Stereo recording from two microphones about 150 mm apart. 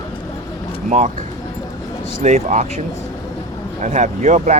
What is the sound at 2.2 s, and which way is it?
Speech, 50° right (ahead or behind).